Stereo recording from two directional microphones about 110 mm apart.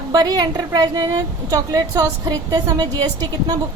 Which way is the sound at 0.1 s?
35° right (ahead or behind).